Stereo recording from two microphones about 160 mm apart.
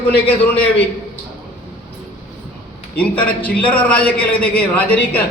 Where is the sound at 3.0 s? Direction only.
10° left (ahead or behind).